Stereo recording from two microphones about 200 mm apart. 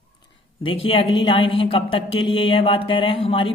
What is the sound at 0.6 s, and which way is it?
A woman's voice, 25° left (ahead or behind).